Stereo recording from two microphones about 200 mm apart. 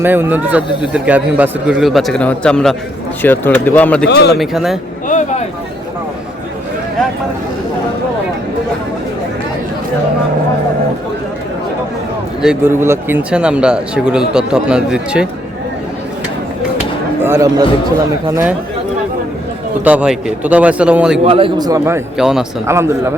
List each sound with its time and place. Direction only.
0.0 s a man's voice: 10° right (ahead or behind); by 4.0 s 10° left (ahead or behind)
4.1 s speech: 55° left (ahead or behind)
4.4 s speech: centre (ahead or behind)
12.4 s speech: 5° right (ahead or behind)
17.2 s a man's voice: 10° right (ahead or behind)
19.8 s a man's voice: 5° right (ahead or behind)
21.2 s a man's voice: 25° right (ahead or behind)
22.2 s speech: centre (ahead or behind)
22.6 s a man's voice: 15° right (ahead or behind)